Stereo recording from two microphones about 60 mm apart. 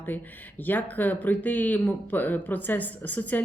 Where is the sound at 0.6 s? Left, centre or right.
Left.